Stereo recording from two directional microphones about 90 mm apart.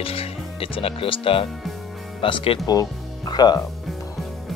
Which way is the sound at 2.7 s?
45° left (ahead or behind).